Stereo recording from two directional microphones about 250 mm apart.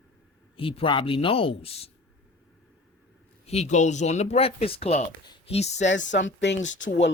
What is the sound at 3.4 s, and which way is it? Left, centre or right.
Speech, left.